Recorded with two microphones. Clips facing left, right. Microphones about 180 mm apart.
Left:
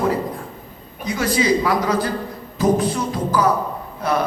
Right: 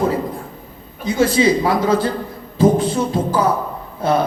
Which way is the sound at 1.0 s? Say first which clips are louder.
Right 4 dB; 25° right (ahead or behind).